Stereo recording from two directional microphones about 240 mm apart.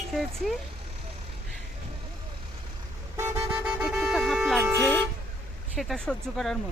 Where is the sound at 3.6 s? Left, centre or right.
Centre.